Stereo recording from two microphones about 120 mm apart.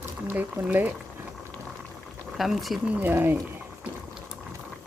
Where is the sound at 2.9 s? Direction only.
15° right (ahead or behind).